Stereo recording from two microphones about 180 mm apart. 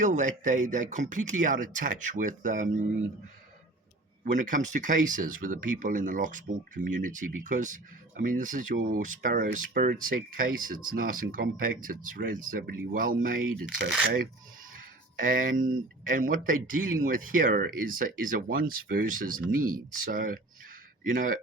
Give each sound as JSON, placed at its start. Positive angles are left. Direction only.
{"t": 0.0, "sound": "speech", "side_deg": -45}
{"t": 4.2, "sound": "speech", "side_deg": -45}
{"t": 14.8, "sound": "speech", "side_deg": -50}